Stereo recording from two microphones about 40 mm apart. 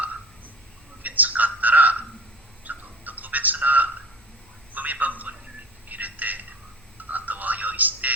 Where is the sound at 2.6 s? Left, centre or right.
Right.